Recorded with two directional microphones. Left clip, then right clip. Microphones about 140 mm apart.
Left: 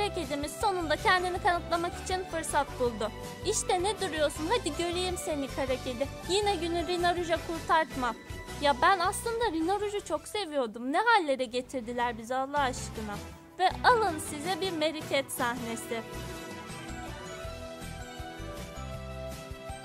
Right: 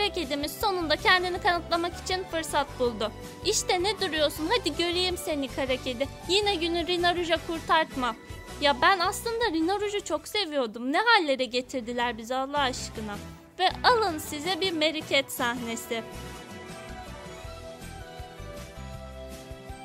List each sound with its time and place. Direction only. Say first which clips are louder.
0.0 s speech: right 3 dB; 25° right (ahead or behind)